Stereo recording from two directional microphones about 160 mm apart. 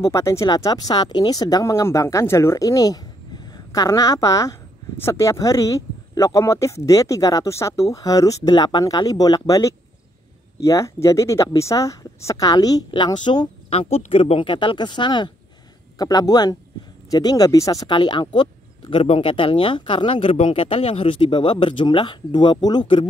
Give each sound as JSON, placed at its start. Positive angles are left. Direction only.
{"t": 0.0, "sound": "speech", "side_deg": 20}